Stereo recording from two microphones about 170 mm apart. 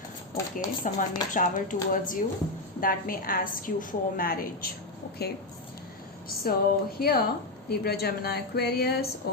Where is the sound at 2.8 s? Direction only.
55° left (ahead or behind).